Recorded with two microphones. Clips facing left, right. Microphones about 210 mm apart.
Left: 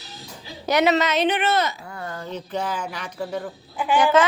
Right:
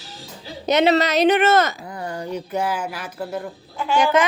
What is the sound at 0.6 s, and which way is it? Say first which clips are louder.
Speech: right 2 dB; 20° right (ahead or behind).